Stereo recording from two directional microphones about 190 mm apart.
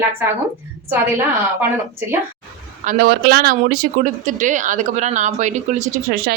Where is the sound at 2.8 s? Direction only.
50° right (ahead or behind).